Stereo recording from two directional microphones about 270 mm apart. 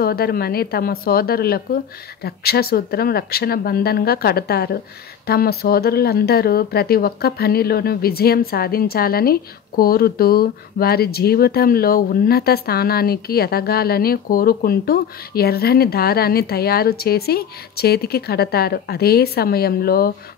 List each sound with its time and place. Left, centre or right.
0.0 s speech: left